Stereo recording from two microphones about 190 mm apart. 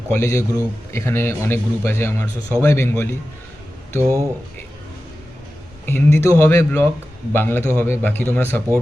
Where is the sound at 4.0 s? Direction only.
15° right (ahead or behind).